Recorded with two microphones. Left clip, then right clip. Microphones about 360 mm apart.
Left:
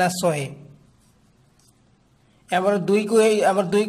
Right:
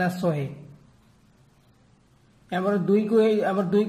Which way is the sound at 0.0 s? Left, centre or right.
Left.